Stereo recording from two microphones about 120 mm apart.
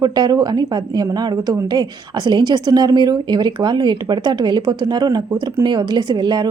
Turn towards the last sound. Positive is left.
turn(degrees=-35)  # may be behind; listen again after turning